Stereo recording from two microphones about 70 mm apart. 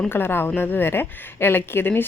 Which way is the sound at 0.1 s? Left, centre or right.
Left.